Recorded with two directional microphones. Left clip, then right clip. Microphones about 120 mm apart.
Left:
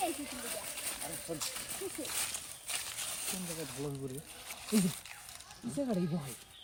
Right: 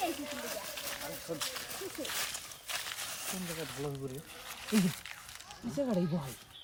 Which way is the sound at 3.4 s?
15° left (ahead or behind).